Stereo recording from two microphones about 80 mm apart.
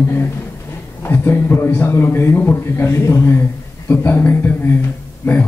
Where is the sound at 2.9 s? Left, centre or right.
Left.